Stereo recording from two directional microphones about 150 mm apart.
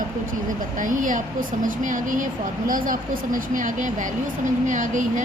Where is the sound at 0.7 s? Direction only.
60° right (ahead or behind).